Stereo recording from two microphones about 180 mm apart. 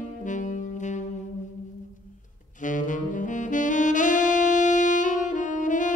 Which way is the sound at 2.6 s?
45° left (ahead or behind).